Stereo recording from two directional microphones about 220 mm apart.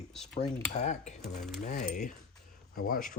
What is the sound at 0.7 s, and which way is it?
Speech, 30° left (ahead or behind).